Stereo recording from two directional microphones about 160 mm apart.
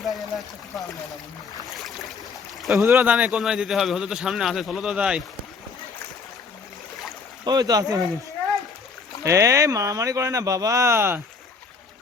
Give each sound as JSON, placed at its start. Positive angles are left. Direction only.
{"t": 0.0, "sound": "pour", "side_deg": 0}
{"t": 1.6, "sound": "boat", "side_deg": 0}
{"t": 2.6, "sound": "speech", "side_deg": 0}
{"t": 2.8, "sound": "a man's voice", "side_deg": -10}
{"t": 7.4, "sound": "speech", "side_deg": -25}
{"t": 9.2, "sound": "speech", "side_deg": -20}